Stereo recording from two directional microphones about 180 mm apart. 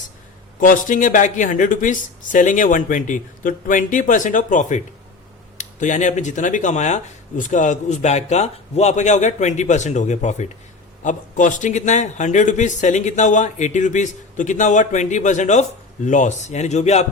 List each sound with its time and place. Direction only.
0.6 s a man's voice: 50° left (ahead or behind)